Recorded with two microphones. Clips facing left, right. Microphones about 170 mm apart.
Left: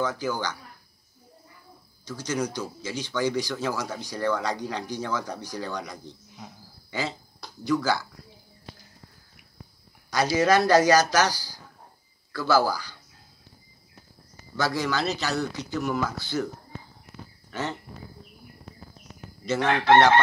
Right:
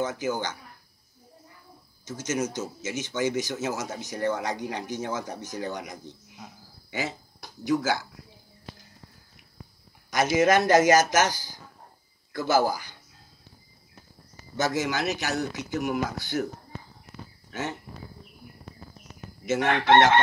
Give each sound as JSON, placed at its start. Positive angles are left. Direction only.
{"t": 0.1, "sound": "speech", "side_deg": -25}
{"t": 2.0, "sound": "speech", "side_deg": -25}
{"t": 10.1, "sound": "speech", "side_deg": -20}
{"t": 14.6, "sound": "speech", "side_deg": -20}
{"t": 19.4, "sound": "chicken", "side_deg": -20}